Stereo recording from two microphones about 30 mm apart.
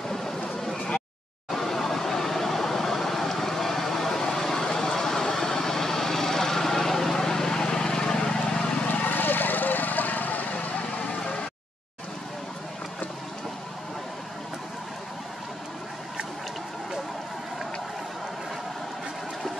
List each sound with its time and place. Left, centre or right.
0.7 s a sound: left
1.5 s vehicle: centre; by 8.8 s left
9.0 s vehicle: left